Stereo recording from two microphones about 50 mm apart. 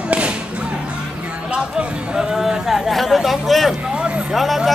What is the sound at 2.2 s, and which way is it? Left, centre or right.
Speech, centre.